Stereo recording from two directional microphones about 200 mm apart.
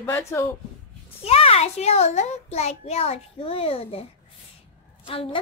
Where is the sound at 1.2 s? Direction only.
30° left (ahead or behind).